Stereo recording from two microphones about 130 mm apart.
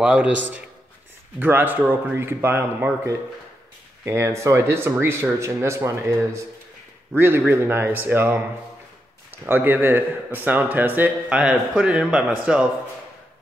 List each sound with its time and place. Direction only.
0.0 s speech: 10° right (ahead or behind)
7.2 s speech: 15° right (ahead or behind)
9.4 s speech: 15° right (ahead or behind)